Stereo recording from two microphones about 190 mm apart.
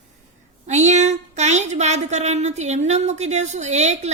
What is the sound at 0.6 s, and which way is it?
Speech, 35° right (ahead or behind).